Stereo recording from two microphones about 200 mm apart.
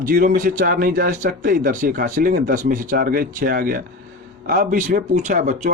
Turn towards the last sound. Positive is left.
turn(degrees=-40)  # may be behind; listen again after turning